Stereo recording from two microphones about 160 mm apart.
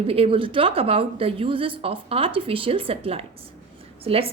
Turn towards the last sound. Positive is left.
turn(degrees=-35)  # may be behind; listen again after turning